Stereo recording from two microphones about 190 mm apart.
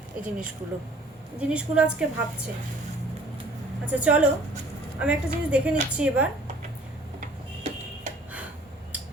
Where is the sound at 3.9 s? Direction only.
5° right (ahead or behind).